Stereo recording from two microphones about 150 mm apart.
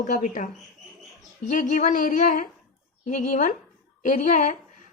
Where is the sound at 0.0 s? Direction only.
60° left (ahead or behind).